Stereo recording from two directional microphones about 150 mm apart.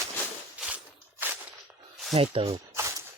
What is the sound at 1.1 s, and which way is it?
Walk, 15° right (ahead or behind).